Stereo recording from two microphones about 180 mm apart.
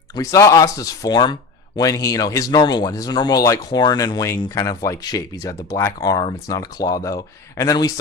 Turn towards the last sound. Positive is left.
turn(degrees=20)  # may be behind; listen again after turning